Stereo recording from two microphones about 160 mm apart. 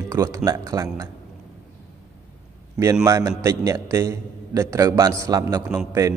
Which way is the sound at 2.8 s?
20° right (ahead or behind).